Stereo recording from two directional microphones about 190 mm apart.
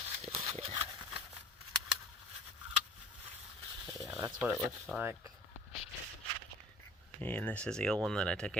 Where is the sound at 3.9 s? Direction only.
15° right (ahead or behind).